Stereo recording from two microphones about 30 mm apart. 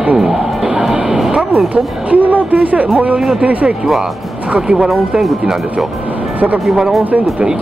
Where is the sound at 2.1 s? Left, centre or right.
Right.